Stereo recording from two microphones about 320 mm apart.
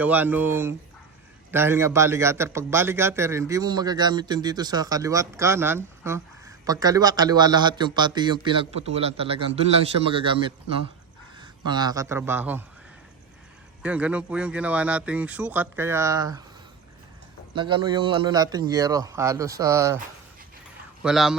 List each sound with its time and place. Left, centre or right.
0.0 s a man's voice: centre
13.8 s a man's voice: centre
17.5 s a man's voice: centre
21.0 s a man's voice: centre